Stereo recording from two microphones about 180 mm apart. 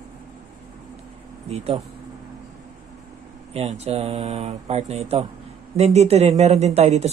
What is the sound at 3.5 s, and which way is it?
Speech, 35° right (ahead or behind).